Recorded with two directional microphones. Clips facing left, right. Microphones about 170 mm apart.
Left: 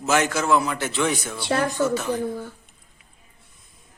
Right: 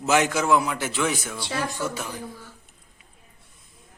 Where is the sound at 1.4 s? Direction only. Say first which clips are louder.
Left 7 dB; 55° left (ahead or behind).